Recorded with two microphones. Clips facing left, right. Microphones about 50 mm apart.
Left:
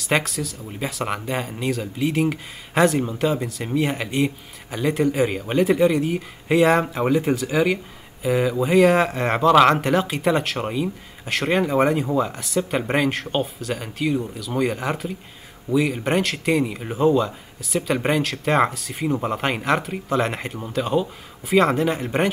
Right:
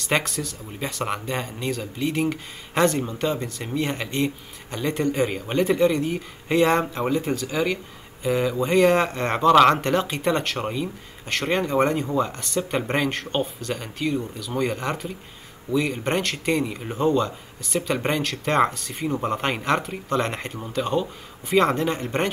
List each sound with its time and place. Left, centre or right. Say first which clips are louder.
0.0 s speech: left 2 dB; centre